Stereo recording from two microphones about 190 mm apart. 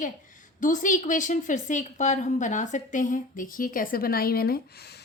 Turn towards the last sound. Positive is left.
turn(degrees=60)  # may be behind; listen again after turning